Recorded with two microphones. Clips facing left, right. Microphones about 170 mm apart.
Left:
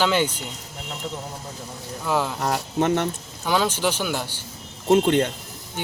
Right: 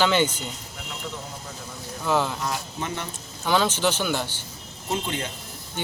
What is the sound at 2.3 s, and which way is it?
Speech, 60° left (ahead or behind).